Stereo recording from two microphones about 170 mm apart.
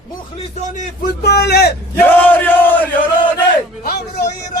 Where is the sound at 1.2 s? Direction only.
75° left (ahead or behind).